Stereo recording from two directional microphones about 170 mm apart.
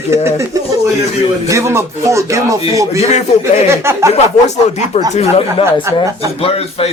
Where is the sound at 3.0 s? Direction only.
40° left (ahead or behind).